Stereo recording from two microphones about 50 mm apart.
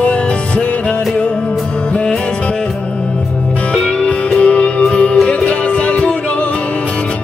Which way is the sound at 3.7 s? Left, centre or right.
Centre.